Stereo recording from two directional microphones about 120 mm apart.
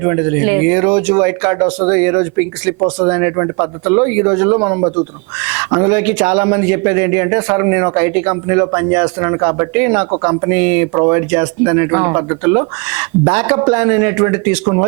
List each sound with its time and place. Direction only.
0.0 s speech: 25° right (ahead or behind)